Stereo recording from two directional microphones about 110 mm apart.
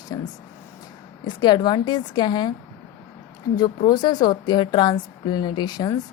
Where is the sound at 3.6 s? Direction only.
40° left (ahead or behind).